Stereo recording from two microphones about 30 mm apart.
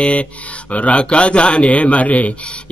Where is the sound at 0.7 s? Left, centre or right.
Left.